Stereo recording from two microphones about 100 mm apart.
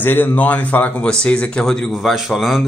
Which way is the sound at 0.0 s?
20° left (ahead or behind).